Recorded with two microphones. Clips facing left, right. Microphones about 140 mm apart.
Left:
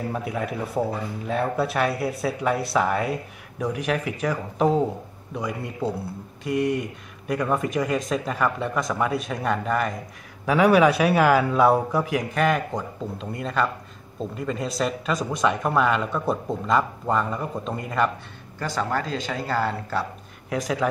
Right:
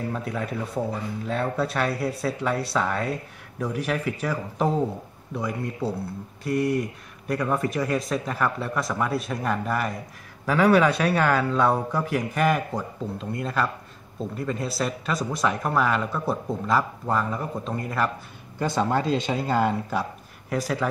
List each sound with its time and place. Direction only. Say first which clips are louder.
0.1 s a man's voice: left 1 dB; 5° left (ahead or behind)
18.6 s speech: right 3 dB; 20° right (ahead or behind)
20.4 s a man's voice: left 1 dB; centre (ahead or behind)